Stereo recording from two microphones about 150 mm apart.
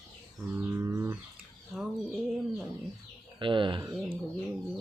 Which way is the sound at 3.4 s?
35° right (ahead or behind).